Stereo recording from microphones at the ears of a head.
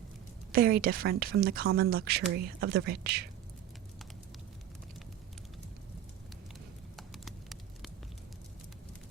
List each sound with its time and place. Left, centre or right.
0.5 s speech: right